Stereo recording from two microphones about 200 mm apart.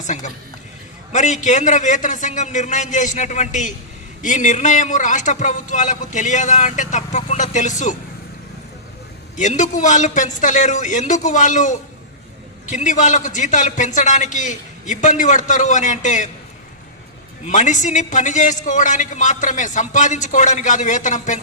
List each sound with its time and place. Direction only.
1.1 s a man's voice: 35° left (ahead or behind)
9.3 s a man's voice: 35° left (ahead or behind)
17.4 s a man's voice: 35° left (ahead or behind)